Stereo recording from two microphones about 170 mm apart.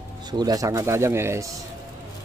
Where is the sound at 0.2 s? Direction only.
25° right (ahead or behind).